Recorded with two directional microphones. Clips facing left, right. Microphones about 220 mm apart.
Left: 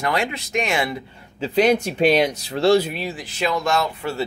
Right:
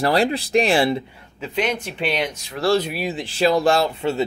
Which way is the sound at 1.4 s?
35° left (ahead or behind).